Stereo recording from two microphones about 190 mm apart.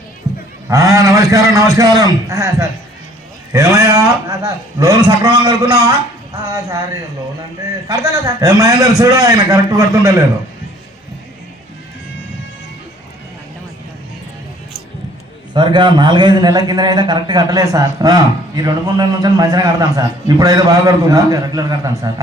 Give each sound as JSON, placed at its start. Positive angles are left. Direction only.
{"t": 0.7, "sound": "a man's voice", "side_deg": -15}
{"t": 15.5, "sound": "a man's voice", "side_deg": -25}